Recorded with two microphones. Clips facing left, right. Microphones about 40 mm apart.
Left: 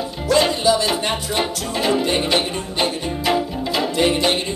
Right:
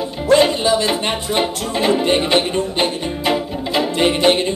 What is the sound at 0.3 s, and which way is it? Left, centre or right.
Music, right.